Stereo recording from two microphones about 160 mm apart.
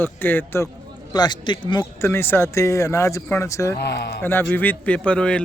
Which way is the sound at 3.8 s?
90° left.